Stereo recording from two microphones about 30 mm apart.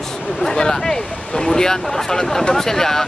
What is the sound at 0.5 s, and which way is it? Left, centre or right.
Speech, left.